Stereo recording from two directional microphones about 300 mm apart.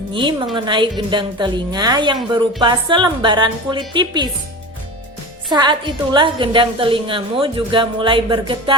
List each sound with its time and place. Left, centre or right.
0.1 s a woman's voice: centre
5.5 s a woman's voice: centre